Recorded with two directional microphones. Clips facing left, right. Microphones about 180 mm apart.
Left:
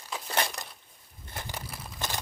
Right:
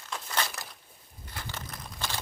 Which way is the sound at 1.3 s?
10° left (ahead or behind).